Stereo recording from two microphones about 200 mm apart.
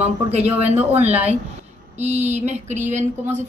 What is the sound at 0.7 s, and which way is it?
Speech, 30° right (ahead or behind).